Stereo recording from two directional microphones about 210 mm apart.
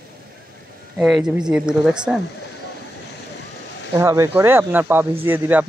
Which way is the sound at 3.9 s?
15° right (ahead or behind).